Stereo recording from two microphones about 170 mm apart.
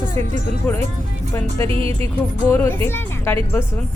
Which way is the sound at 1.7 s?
35° right (ahead or behind).